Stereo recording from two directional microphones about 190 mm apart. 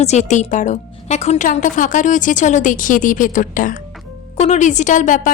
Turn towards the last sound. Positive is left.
turn(degrees=40)  # may be behind; listen again after turning